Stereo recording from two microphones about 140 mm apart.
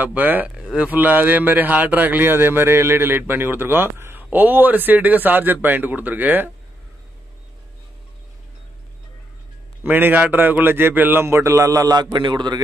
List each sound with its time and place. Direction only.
0.0 s a man's voice: 15° right (ahead or behind)
9.8 s a man's voice: 15° right (ahead or behind); by 12.5 s 30° right (ahead or behind)